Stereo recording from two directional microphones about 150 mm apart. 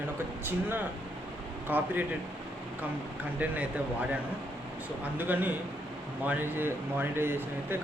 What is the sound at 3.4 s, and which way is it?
Speech, 10° right (ahead or behind).